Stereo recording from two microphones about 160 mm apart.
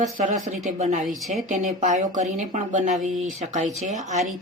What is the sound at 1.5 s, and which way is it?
Speech, 55° right (ahead or behind).